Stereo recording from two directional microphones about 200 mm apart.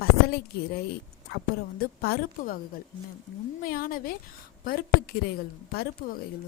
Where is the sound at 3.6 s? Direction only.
45° left (ahead or behind).